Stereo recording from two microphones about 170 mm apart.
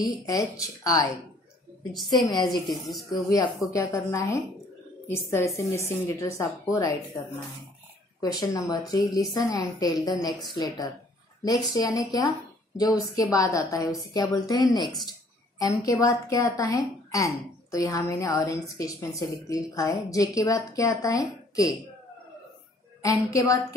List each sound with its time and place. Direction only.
0.3 s a woman's voice: 20° left (ahead or behind)
2.0 s a woman's voice: 25° left (ahead or behind)
2.7 s speech: centre (ahead or behind)
3.1 s a woman's voice: 25° left (ahead or behind)
23.0 s a woman's voice: 20° left (ahead or behind)